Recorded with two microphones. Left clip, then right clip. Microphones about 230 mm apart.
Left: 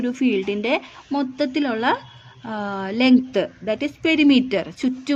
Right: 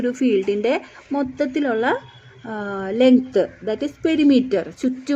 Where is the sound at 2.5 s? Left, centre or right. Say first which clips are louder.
Even; left.